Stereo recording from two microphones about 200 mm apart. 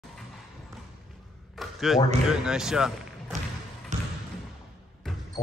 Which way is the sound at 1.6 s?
Centre (ahead or behind).